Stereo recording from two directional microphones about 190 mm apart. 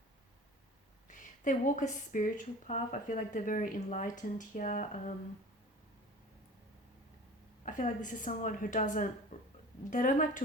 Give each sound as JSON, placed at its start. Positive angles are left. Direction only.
{"t": 1.0, "sound": "speech", "side_deg": 45}
{"t": 7.6, "sound": "speech", "side_deg": 40}